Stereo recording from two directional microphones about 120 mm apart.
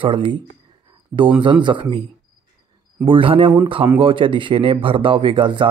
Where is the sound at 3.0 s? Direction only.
45° right (ahead or behind).